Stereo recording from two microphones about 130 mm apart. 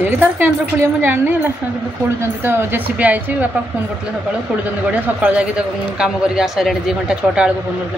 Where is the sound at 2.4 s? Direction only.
15° right (ahead or behind).